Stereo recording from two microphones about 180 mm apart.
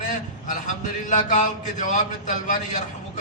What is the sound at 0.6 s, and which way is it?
A man's voice, 40° left (ahead or behind).